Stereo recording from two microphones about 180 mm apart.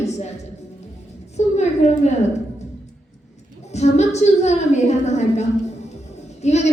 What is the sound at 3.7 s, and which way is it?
A woman's voice, 40° left (ahead or behind).